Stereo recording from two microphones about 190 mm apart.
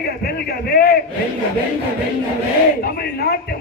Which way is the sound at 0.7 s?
55° left (ahead or behind).